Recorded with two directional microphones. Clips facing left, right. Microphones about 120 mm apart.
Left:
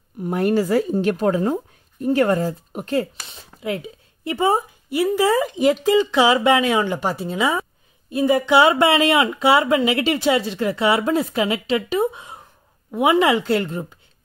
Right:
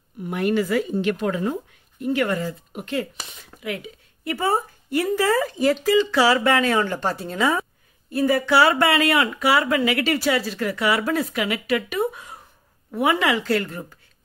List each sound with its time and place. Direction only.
0.2 s a woman's voice: 40° left (ahead or behind); by 13.9 s 20° left (ahead or behind)